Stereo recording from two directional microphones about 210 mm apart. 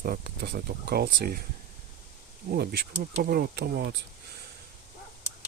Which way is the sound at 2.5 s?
50° right (ahead or behind).